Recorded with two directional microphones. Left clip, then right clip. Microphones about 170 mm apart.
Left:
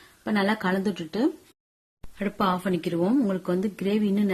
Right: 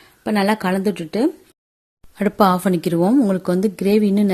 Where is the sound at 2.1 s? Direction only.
50° right (ahead or behind).